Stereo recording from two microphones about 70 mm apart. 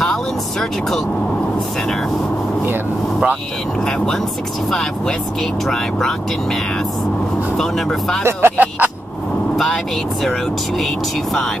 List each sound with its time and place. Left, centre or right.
0.0 s speech: centre
3.8 s speech: centre
8.2 s speech: right
8.5 s vehicle: right